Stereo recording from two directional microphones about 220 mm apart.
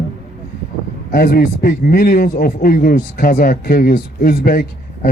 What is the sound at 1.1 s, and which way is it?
A man's voice, 40° left (ahead or behind).